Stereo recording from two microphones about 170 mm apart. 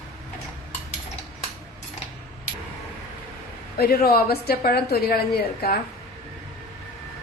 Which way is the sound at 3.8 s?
60° left (ahead or behind).